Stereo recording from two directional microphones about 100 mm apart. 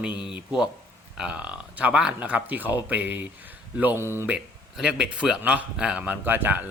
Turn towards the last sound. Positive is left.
turn(degrees=-20)  # may be behind; listen again after turning